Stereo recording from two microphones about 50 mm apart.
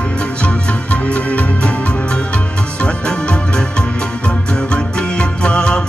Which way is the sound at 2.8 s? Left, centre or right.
Left.